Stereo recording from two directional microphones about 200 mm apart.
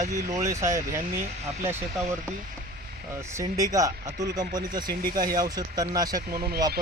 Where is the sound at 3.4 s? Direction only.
15° right (ahead or behind).